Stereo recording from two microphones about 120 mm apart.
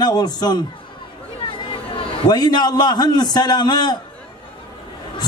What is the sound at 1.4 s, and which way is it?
A man's voice, 45° left (ahead or behind).